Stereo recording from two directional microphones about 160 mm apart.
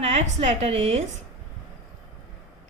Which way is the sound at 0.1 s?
45° right (ahead or behind).